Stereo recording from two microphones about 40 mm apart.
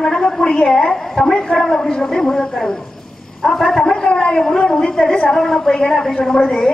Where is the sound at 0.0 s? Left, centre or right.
Centre.